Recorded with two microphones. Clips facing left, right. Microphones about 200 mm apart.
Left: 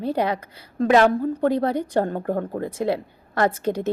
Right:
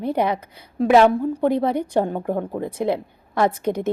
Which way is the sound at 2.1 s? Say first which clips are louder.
Right 1 dB; 10° right (ahead or behind).